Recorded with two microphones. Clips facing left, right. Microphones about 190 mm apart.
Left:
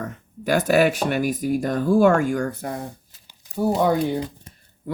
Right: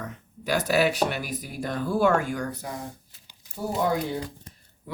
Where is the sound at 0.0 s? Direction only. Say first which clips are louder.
Left 6 dB; 50° left (ahead or behind).